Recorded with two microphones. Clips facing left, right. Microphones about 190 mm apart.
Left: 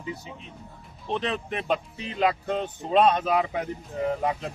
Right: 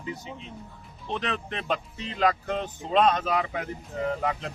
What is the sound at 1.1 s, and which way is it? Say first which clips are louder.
A man's voice: left 3 dB; 15° left (ahead or behind).